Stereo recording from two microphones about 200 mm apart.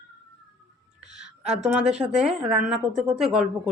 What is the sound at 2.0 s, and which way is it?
Speech, 20° right (ahead or behind).